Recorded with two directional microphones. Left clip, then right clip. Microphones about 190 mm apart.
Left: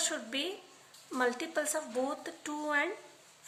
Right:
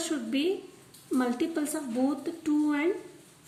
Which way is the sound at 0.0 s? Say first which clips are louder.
Right 5 dB; 35° left (ahead or behind).